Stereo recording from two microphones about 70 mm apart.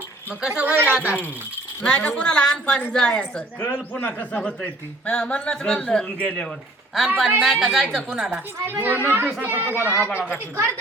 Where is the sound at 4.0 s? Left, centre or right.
Left.